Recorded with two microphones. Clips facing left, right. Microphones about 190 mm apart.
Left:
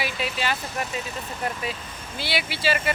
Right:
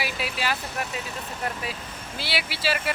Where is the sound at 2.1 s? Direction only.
5° right (ahead or behind).